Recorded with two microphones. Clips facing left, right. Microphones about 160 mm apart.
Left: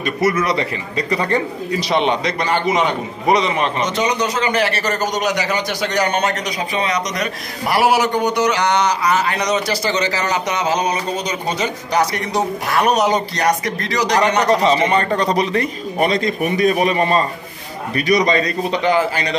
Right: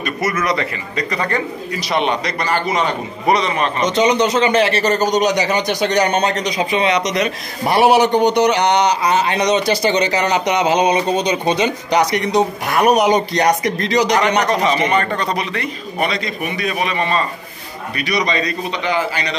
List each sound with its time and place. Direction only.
0.2 s a man's voice: 30° left (ahead or behind)
3.8 s a man's voice: 20° right (ahead or behind)
6.8 s a man's voice: 40° left (ahead or behind)
7.6 s a man's voice: 25° right (ahead or behind)
14.5 s a man's voice: 30° left (ahead or behind)